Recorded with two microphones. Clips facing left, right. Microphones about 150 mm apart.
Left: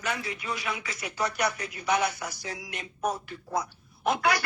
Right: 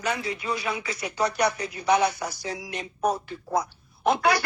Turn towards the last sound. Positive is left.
turn(degrees=-30)  # may be behind; listen again after turning